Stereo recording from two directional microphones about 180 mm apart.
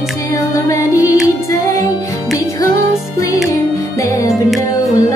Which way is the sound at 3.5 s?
15° left (ahead or behind).